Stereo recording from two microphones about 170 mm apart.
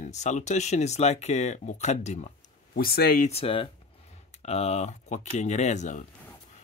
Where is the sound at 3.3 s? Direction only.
35° left (ahead or behind).